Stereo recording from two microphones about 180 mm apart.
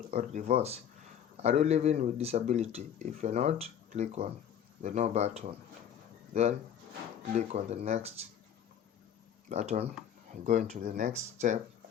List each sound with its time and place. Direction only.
0.2 s speech: 45° right (ahead or behind)
7.3 s speech: 40° right (ahead or behind)
9.5 s speech: 40° right (ahead or behind)